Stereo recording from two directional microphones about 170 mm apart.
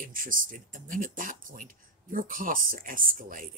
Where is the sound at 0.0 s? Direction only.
55° right (ahead or behind).